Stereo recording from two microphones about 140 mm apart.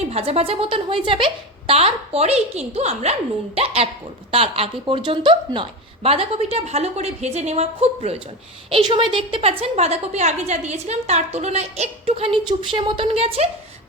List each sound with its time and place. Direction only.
0.1 s a woman's voice: 50° right (ahead or behind)
8.9 s a woman's voice: 35° right (ahead or behind)